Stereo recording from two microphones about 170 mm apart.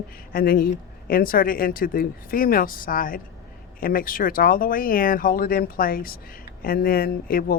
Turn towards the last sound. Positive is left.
turn(degrees=60)  # may be behind; listen again after turning